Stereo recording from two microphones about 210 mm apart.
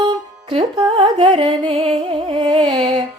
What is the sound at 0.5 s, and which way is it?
Music, 25° right (ahead or behind).